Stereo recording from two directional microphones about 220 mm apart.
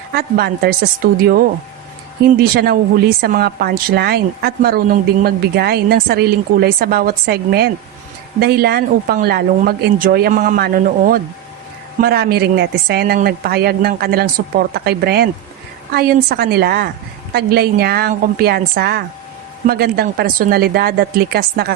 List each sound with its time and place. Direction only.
0.1 s a woman's voice: 45° right (ahead or behind)